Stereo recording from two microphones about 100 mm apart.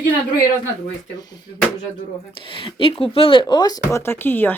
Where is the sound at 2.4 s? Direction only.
60° left (ahead or behind); by 3.8 s 45° left (ahead or behind).